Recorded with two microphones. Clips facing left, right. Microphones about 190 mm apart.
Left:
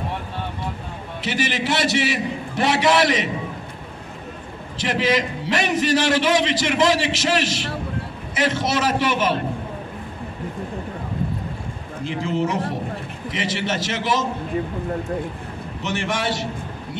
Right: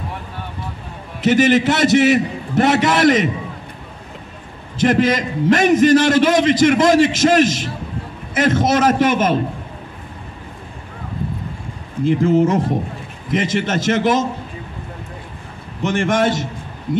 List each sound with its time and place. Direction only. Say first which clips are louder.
1.2 s a man's voice: right 11 dB; 50° right (ahead or behind)
4.7 s a man's voice: right 6 dB; 50° right (ahead or behind)
12.0 s a man's voice: right 9 dB; 50° right (ahead or behind)
15.8 s a man's voice: right 8 dB; 50° right (ahead or behind)